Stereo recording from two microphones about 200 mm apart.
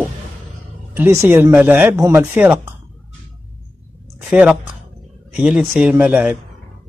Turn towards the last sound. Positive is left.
turn(degrees=-10)  # may be behind; listen again after turning